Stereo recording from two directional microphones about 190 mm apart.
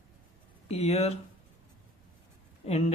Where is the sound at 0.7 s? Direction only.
35° left (ahead or behind).